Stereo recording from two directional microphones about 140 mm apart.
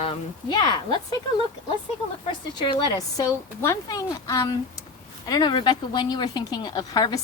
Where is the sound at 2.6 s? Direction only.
30° left (ahead or behind).